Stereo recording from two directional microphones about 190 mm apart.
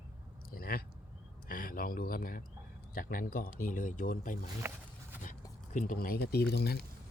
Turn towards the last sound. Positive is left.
turn(degrees=60)  # may be behind; listen again after turning